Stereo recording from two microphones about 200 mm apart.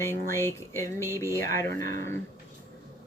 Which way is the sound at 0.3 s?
15° left (ahead or behind).